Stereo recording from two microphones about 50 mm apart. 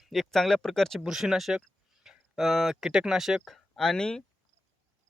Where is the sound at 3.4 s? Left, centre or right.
Centre.